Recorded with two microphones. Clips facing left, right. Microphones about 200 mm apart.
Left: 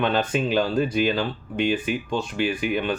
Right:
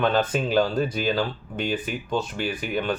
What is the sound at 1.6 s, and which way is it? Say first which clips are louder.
Speech: left 4 dB; 45° right (ahead or behind).